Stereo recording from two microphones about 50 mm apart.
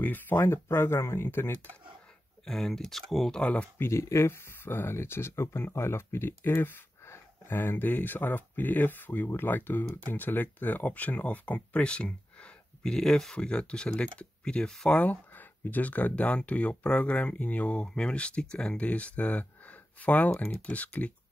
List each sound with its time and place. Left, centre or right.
0.0 s a sound: left
0.4 s speech: left
2.4 s speech: centre
3.3 s speech: left
3.9 s speech: left; by 14.8 s centre
14.9 s speech: left